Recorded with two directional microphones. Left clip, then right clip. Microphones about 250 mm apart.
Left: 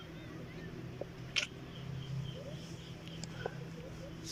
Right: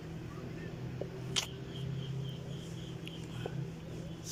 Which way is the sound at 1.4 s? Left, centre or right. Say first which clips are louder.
Even; right.